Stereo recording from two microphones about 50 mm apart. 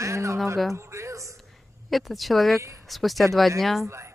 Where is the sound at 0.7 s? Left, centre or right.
Right.